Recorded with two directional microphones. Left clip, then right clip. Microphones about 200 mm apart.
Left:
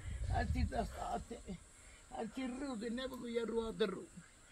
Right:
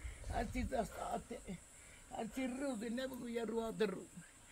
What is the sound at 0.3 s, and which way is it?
Speech, 30° right (ahead or behind).